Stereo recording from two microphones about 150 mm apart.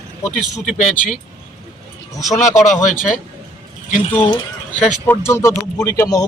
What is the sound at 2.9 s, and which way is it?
Speech, 55° left (ahead or behind).